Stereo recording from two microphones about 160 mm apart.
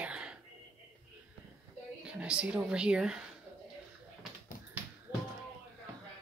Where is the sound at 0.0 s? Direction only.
5° right (ahead or behind).